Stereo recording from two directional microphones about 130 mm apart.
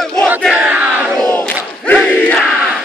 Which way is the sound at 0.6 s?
10° right (ahead or behind).